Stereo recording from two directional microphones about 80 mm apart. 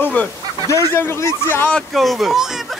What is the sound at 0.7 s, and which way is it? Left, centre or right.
Speech, left.